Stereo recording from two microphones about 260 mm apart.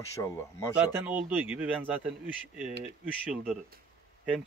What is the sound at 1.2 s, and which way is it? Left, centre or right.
Speech, centre.